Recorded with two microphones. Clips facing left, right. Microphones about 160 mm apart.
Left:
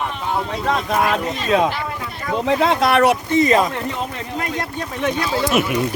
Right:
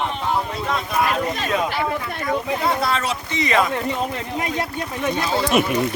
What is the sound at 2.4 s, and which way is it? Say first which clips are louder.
Speech: left 10 dB; 90° left.